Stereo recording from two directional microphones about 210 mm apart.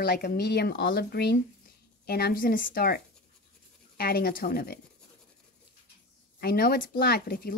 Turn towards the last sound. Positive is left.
turn(degrees=45)  # may be behind; listen again after turning